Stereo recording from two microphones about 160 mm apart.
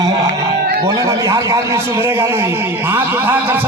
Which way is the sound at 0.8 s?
20° right (ahead or behind).